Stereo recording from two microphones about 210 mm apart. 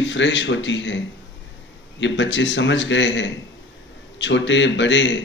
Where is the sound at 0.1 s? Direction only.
60° left (ahead or behind).